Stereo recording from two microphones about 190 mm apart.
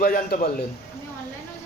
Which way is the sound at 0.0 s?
50° left (ahead or behind).